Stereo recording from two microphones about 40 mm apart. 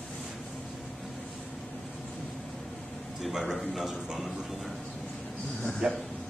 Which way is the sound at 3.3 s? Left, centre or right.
Centre.